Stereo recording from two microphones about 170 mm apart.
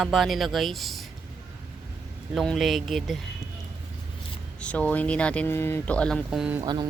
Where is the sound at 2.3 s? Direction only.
Centre (ahead or behind).